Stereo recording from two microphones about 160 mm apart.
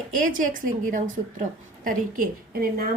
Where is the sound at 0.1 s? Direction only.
55° right (ahead or behind); by 2.9 s 75° right (ahead or behind).